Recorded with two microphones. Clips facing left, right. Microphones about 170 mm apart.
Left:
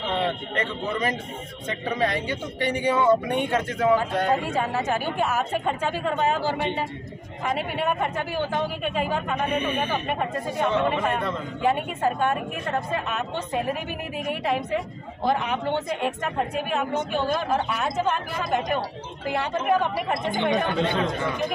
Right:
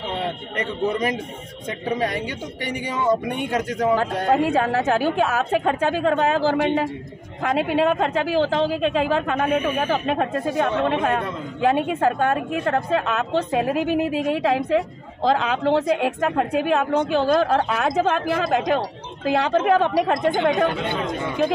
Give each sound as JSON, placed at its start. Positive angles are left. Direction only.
{"t": 2.0, "sound": "speech", "side_deg": -15}
{"t": 3.9, "sound": "a woman's voice", "side_deg": -65}
{"t": 7.4, "sound": "speech", "side_deg": -90}
{"t": 11.6, "sound": "a woman's voice", "side_deg": -70}
{"t": 17.1, "sound": "a woman's voice", "side_deg": -85}